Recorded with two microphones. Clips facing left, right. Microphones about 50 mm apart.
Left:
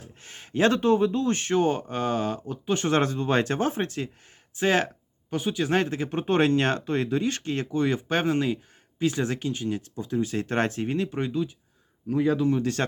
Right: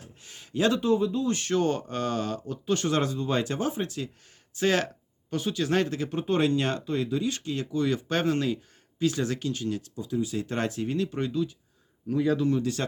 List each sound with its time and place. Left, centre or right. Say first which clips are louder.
0.2 s speech: left 3 dB; left
1.3 s speech: left 2 dB; left
2.9 s speech: left 3 dB; left
4.5 s speech: left 2 dB; left
9.9 s speech: left 2 dB; left